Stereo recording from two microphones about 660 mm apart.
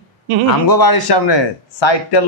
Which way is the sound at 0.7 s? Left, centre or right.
Left.